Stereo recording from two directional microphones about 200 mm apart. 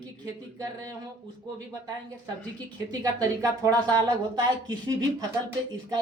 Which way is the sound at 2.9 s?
15° right (ahead or behind).